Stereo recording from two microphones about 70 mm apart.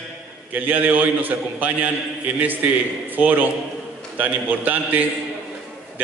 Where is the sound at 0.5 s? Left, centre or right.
Right.